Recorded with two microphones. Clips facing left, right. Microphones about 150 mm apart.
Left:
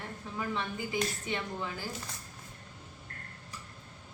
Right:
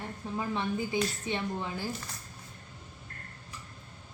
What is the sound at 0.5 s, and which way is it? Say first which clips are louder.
A woman's voice: right 4 dB; 25° right (ahead or behind).